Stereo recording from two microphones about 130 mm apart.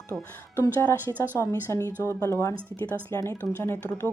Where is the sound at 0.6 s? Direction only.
20° left (ahead or behind).